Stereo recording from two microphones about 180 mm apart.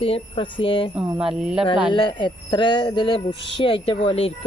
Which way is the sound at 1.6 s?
25° left (ahead or behind).